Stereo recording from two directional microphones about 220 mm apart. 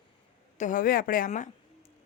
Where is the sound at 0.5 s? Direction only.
35° left (ahead or behind).